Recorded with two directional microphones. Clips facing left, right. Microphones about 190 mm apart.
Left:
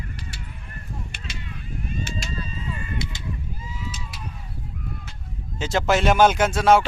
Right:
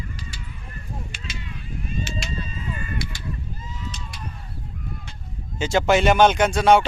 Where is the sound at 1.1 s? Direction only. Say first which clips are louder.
Right 1 dB; 55° left (ahead or behind).